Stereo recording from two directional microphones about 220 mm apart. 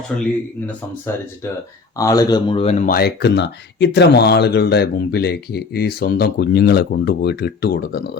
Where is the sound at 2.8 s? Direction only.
45° left (ahead or behind).